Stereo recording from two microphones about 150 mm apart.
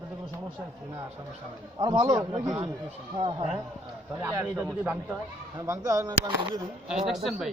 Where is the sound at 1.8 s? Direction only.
30° right (ahead or behind).